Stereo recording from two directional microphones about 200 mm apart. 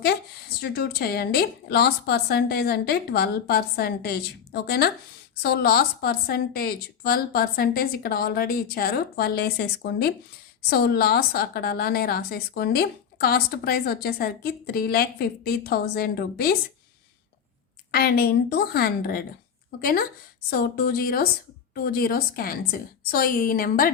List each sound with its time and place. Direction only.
0.6 s a woman's voice: 50° left (ahead or behind)
17.9 s a woman's voice: 50° left (ahead or behind)